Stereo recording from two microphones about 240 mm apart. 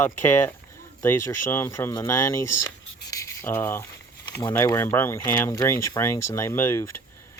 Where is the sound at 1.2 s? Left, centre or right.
Left.